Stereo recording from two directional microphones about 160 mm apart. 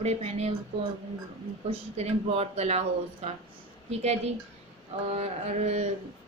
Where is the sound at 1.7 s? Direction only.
40° right (ahead or behind).